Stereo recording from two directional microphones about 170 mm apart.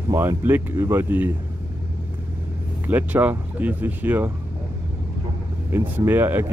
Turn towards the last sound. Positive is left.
turn(degrees=-10)  # may be behind; listen again after turning